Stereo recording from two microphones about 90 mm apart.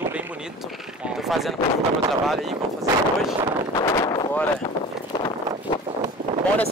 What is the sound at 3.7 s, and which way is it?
Speech, 40° left (ahead or behind).